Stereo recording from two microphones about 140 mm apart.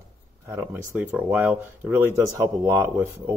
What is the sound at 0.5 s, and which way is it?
Speech, 20° right (ahead or behind).